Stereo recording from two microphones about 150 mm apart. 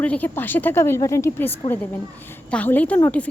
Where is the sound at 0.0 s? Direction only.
10° left (ahead or behind).